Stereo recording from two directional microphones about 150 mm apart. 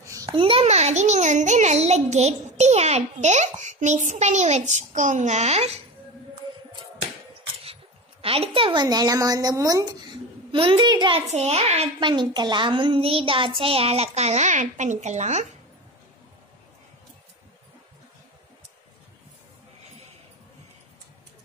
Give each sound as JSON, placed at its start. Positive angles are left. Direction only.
{"t": 0.0, "sound": "babbling", "side_deg": -20}
{"t": 0.3, "sound": "a child's voice", "side_deg": -35}
{"t": 8.2, "sound": "a child's voice", "side_deg": -40}
{"t": 8.8, "sound": "a woman's voice", "side_deg": -25}
{"t": 10.5, "sound": "a child's voice", "side_deg": -35}
{"t": 11.2, "sound": "a child's voice", "side_deg": -45}
{"t": 12.0, "sound": "a child's voice", "side_deg": -30}